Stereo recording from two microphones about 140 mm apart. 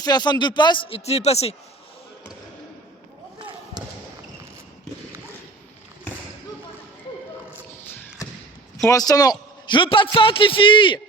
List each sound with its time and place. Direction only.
0.0 s a man's voice: 30° left (ahead or behind); by 1.5 s 50° left (ahead or behind)
3.3 s basketball bounce: 30° right (ahead or behind)
7.5 s a sound: 15° left (ahead or behind)
8.9 s a man's voice: 25° left (ahead or behind)